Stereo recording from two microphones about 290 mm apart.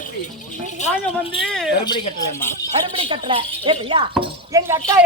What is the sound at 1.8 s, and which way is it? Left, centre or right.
Speech, centre.